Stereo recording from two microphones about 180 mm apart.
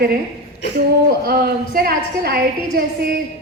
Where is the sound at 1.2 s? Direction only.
55° right (ahead or behind).